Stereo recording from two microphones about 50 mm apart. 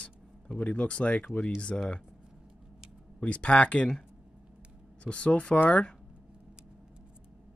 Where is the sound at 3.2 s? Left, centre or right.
Left.